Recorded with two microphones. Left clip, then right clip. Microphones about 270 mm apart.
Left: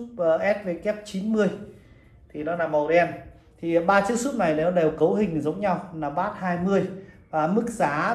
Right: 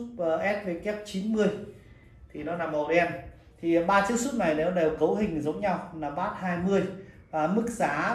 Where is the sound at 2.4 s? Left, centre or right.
Centre.